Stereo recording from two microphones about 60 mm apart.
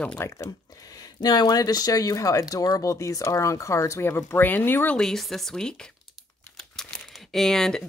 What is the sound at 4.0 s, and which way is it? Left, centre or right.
Speech, left.